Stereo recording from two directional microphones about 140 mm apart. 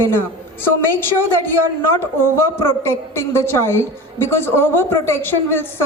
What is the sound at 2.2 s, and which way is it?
A woman's voice, 20° left (ahead or behind).